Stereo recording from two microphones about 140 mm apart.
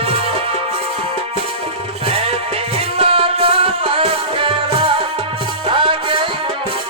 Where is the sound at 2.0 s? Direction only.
45° right (ahead or behind).